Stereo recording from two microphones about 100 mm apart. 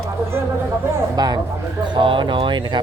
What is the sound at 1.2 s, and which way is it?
Speech, 45° right (ahead or behind).